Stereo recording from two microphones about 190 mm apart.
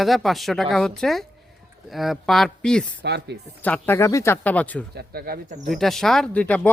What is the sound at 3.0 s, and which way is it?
Speech, 60° right (ahead or behind).